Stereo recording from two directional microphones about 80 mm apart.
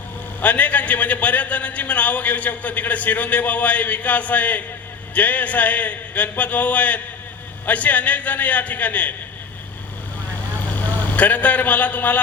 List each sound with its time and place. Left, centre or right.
0.4 s a man's voice: centre
10.8 s a man's voice: left